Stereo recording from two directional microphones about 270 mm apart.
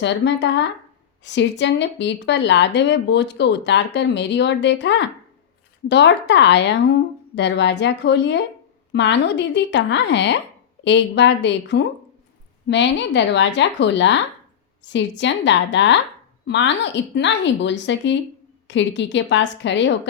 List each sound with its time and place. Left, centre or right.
0.0 s speech: left